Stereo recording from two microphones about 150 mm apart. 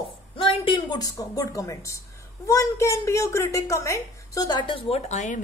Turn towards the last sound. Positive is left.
turn(degrees=55)  # may be behind; listen again after turning